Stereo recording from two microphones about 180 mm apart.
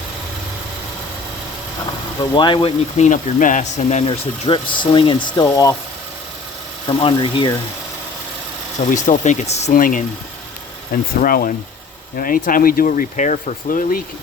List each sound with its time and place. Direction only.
2.3 s speech: 25° left (ahead or behind)
3.1 s speech: 45° left (ahead or behind)
4.4 s speech: 30° left (ahead or behind)
6.8 s speech: 25° left (ahead or behind)
8.9 s speech: 45° left (ahead or behind)
9.7 s speech: 50° left (ahead or behind)
11.2 s speech: 50° left (ahead or behind)